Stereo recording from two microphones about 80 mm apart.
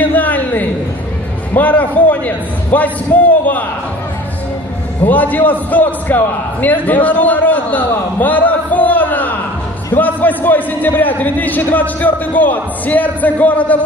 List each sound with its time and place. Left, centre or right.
0.0 s a sound: left
1.5 s a man's voice: left
5.0 s a man's voice: left